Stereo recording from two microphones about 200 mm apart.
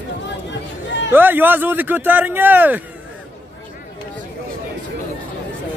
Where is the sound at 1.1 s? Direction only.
10° right (ahead or behind).